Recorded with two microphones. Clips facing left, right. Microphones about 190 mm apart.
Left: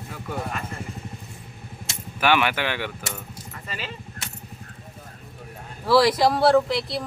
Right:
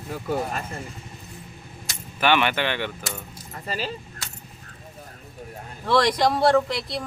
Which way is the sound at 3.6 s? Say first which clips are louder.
Right 6 dB; 35° right (ahead or behind).